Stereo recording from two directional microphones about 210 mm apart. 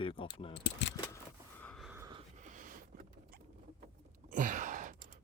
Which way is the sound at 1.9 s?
15° right (ahead or behind).